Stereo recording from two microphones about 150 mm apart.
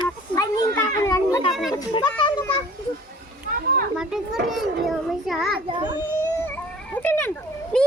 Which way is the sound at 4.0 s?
5° right (ahead or behind).